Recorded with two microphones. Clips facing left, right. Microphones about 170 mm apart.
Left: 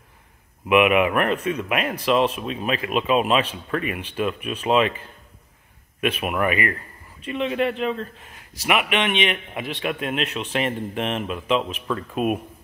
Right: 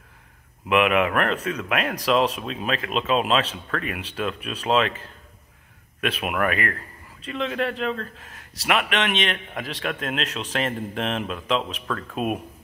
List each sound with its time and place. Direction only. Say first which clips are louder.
0.7 s a man's voice: left 3 dB; 5° left (ahead or behind)
5.9 s a man's voice: left 2 dB; 5° left (ahead or behind)